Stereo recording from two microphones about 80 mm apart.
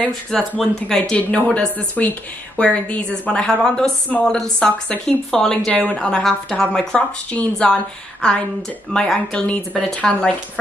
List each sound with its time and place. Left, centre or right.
0.3 s speech: centre
0.9 s a woman's voice: centre
5.7 s a woman's voice: centre
5.9 s a woman's voice: centre